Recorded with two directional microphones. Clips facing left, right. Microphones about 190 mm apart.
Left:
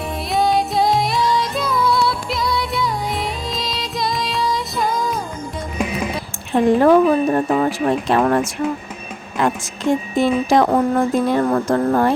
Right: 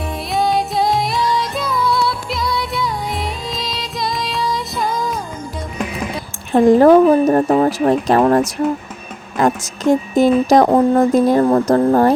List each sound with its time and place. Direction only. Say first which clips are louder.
0.3 s music: even; centre (ahead or behind)
6.5 s speech: right 4 dB; 40° right (ahead or behind)